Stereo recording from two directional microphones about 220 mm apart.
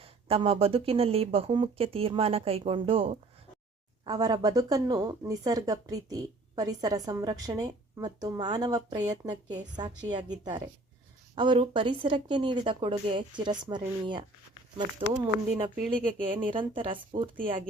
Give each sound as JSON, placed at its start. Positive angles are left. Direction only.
{"t": 0.0, "sound": "a woman's voice", "side_deg": -25}